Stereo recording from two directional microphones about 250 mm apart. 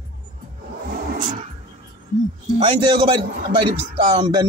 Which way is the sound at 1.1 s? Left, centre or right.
Right.